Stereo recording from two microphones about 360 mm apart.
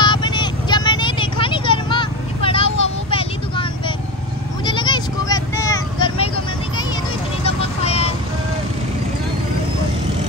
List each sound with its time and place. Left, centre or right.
0.0 s vehicle: centre
7.4 s vehicle: centre